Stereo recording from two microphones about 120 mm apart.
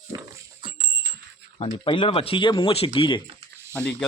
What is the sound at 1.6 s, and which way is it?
Speech, 45° left (ahead or behind).